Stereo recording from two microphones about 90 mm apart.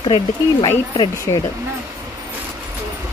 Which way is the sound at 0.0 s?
65° left (ahead or behind).